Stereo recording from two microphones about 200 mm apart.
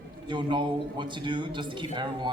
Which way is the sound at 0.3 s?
25° right (ahead or behind).